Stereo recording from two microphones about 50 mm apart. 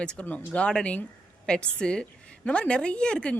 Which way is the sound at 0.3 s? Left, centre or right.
Left.